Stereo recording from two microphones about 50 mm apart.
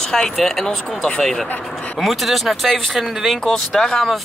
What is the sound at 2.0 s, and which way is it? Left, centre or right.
Speech, centre.